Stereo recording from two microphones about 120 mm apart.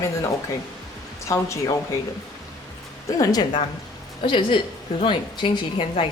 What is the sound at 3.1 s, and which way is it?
Speech, 30° left (ahead or behind).